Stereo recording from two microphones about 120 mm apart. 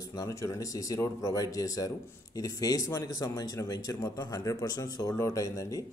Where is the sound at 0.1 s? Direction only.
25° left (ahead or behind).